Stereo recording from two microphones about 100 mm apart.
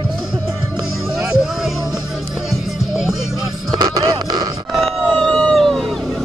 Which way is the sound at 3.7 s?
45° right (ahead or behind).